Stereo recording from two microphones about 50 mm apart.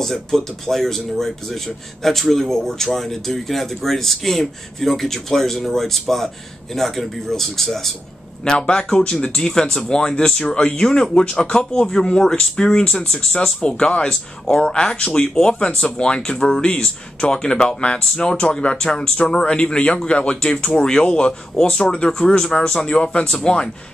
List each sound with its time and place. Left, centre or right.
0.0 s speech: centre
8.5 s speech: centre